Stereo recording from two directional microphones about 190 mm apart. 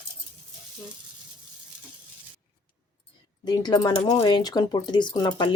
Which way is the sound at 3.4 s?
20° left (ahead or behind).